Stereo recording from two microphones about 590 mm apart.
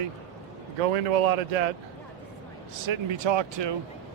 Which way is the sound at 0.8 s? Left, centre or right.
Right.